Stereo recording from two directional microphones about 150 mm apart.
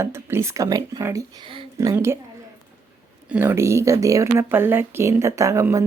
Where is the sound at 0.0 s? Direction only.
15° right (ahead or behind).